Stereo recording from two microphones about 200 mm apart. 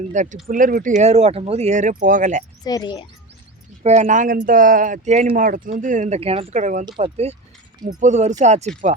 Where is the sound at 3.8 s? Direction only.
40° right (ahead or behind).